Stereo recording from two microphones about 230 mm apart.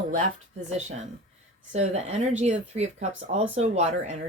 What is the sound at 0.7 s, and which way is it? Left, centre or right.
Speech, right.